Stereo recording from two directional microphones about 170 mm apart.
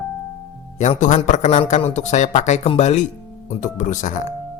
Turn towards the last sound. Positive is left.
turn(degrees=45)  # may be behind; listen again after turning